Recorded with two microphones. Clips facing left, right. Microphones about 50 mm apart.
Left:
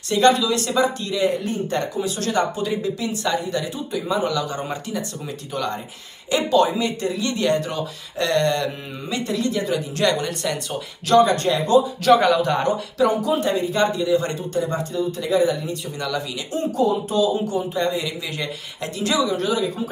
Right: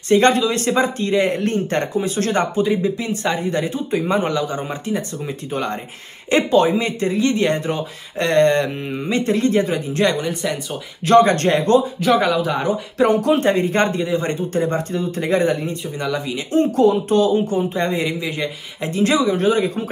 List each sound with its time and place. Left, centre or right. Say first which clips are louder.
0.1 s speech: right 2 dB; right
2.0 s speech: right 3 dB; right
2.6 s speech: right 5 dB; right
10.1 s speech: right 2 dB; centre
11.1 s speech: right 3 dB; right
12.1 s speech: left 1 dB; centre
12.9 s speech: right 5 dB; right
15.7 s speech: right 3 dB; right
16.5 s speech: right 6 dB; right
18.3 s speech: right 4 dB; right
18.9 s speech: right 4 dB; right